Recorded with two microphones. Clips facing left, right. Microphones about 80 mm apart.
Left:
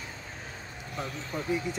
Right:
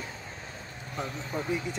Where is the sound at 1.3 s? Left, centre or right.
Centre.